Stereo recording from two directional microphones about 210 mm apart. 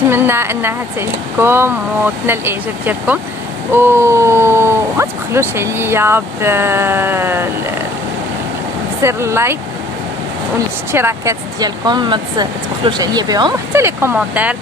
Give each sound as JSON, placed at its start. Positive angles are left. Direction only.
{"t": 0.1, "sound": "speech", "side_deg": -10}
{"t": 9.0, "sound": "speech", "side_deg": -10}
{"t": 10.9, "sound": "speech", "side_deg": -10}